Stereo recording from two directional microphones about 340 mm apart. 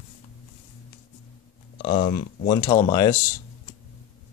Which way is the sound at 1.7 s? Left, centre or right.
Centre.